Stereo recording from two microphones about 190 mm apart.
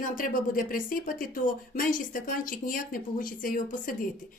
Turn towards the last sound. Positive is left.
turn(degrees=45)  # may be behind; listen again after turning